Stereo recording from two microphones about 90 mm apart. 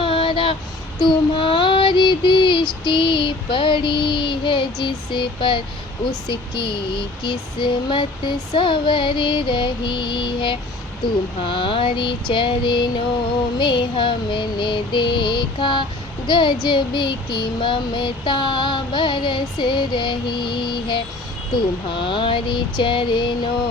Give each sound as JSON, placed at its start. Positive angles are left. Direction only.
{"t": 0.0, "sound": "vehicle", "side_deg": 80}
{"t": 0.9, "sound": "female singing", "side_deg": 65}
{"t": 11.3, "sound": "a sound", "side_deg": 70}
{"t": 12.3, "sound": "female singing", "side_deg": 65}